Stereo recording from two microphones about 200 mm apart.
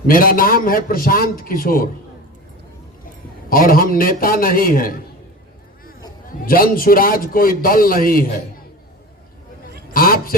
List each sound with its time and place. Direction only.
0.1 s a man's voice: 45° left (ahead or behind)
3.5 s a man's voice: 45° left (ahead or behind)
6.2 s a man's voice: 45° left (ahead or behind)
9.9 s a man's voice: 45° left (ahead or behind)